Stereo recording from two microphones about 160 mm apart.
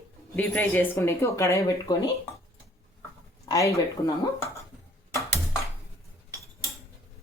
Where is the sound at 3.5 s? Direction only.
20° left (ahead or behind).